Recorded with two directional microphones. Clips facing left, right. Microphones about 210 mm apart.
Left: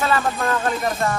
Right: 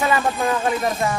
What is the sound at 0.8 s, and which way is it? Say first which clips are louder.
Speech: right 1 dB; centre (ahead or behind).